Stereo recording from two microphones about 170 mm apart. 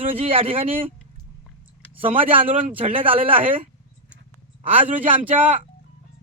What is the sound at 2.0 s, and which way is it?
Speech, 35° right (ahead or behind).